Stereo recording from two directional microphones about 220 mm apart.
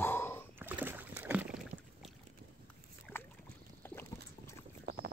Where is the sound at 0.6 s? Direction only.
10° right (ahead or behind).